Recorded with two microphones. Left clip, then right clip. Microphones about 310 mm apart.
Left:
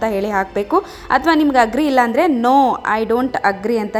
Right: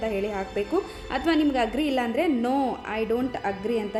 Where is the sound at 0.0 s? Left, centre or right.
Left.